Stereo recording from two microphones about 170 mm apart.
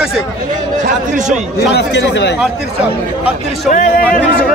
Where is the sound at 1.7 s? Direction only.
90° left.